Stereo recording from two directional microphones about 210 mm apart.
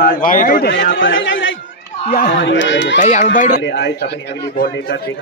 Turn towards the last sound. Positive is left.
turn(degrees=55)  # may be behind; listen again after turning